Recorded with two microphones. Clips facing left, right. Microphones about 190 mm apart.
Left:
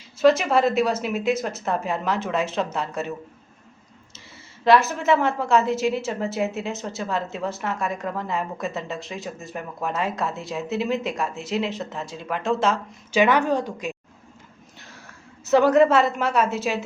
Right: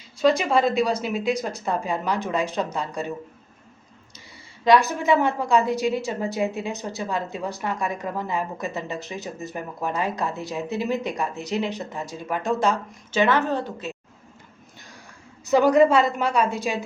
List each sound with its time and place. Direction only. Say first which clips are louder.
0.2 s a woman's voice: left 2 dB; 5° left (ahead or behind)
4.6 s a woman's voice: even; centre (ahead or behind)
12.3 s speech: left 1 dB; 15° right (ahead or behind)
12.5 s a woman's voice: even; 5° left (ahead or behind)
15.4 s a woman's voice: even; centre (ahead or behind)